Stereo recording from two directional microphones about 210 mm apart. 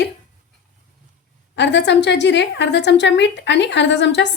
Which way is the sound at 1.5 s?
55° left (ahead or behind).